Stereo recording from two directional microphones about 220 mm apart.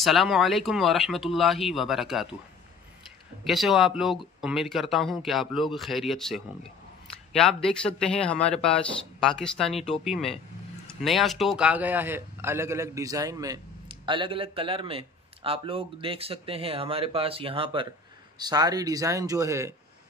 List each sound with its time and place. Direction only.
0.0 s speech: centre (ahead or behind)
3.4 s a man's voice: centre (ahead or behind)